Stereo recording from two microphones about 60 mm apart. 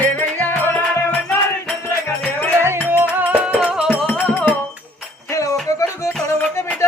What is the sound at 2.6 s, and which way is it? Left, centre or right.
Music, right.